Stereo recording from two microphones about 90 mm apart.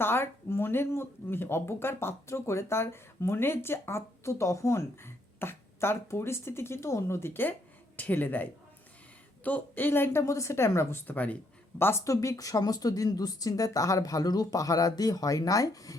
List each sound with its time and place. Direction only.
0.0 s speech: 25° left (ahead or behind)
11.8 s speech: 30° left (ahead or behind)